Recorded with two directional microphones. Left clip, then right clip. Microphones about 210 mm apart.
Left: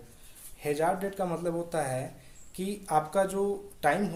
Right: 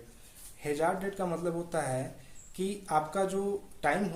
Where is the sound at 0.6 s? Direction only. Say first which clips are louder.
Left 2 dB; 25° left (ahead or behind).